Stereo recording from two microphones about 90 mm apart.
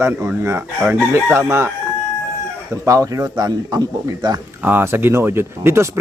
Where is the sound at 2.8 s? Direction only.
40° right (ahead or behind).